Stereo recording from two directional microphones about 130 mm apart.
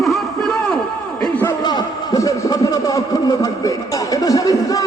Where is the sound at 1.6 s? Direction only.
30° left (ahead or behind).